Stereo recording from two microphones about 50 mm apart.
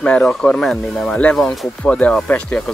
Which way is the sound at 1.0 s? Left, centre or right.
Left.